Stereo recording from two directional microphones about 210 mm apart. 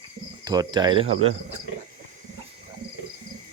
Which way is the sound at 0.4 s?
20° right (ahead or behind).